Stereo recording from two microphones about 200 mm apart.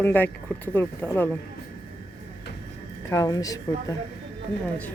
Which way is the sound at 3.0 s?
15° left (ahead or behind).